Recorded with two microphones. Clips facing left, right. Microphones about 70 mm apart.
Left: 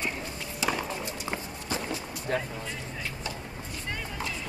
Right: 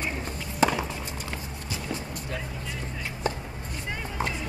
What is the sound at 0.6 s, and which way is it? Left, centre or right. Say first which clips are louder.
Horse: right 7 dB; right.